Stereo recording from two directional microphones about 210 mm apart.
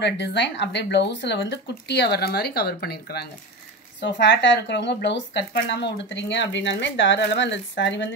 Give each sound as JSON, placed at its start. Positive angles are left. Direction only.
{"t": 0.0, "sound": "speech", "side_deg": 55}